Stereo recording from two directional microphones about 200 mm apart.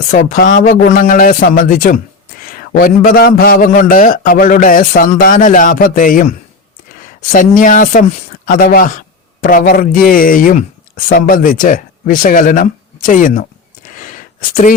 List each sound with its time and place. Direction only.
0.1 s speech: 45° left (ahead or behind)
7.3 s speech: 40° left (ahead or behind)
14.0 s a sound: 40° left (ahead or behind)